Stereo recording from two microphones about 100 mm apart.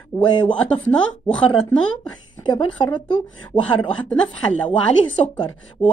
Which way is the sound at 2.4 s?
50° left (ahead or behind).